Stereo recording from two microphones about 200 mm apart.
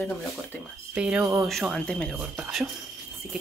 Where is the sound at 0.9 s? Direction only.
5° right (ahead or behind).